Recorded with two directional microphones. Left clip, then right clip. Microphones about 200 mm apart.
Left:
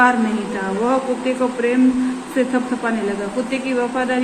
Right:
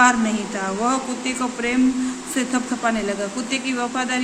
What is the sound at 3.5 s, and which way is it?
Speech, 35° right (ahead or behind).